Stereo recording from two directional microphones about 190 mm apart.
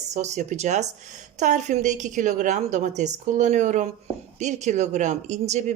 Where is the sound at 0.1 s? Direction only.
35° right (ahead or behind).